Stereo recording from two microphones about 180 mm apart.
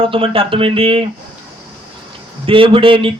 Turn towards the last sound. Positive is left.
turn(degrees=-30)  # may be behind; listen again after turning